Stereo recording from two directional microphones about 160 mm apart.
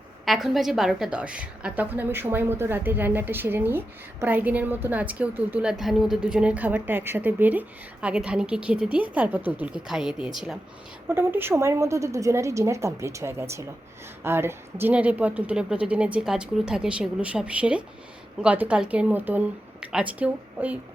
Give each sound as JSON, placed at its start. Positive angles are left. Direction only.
{"t": 0.3, "sound": "a woman's voice", "side_deg": 0}
{"t": 11.1, "sound": "a woman's voice", "side_deg": -15}